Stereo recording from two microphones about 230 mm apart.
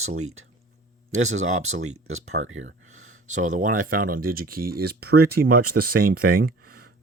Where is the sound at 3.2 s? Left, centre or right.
Right.